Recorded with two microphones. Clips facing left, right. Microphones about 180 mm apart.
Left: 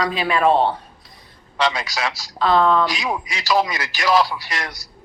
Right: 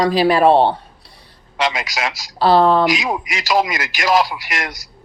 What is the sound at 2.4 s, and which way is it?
Speech, 35° right (ahead or behind).